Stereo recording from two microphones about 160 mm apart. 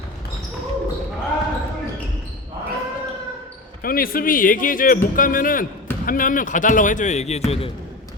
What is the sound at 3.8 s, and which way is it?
Speech, 65° left (ahead or behind).